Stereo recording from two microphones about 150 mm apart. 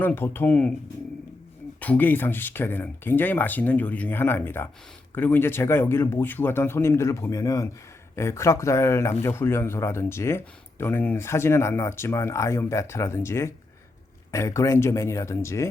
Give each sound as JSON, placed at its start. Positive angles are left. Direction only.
{"t": 0.0, "sound": "speech", "side_deg": 15}
{"t": 1.8, "sound": "speech", "side_deg": 10}